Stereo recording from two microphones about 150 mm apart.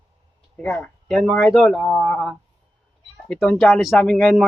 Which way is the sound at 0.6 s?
10° left (ahead or behind).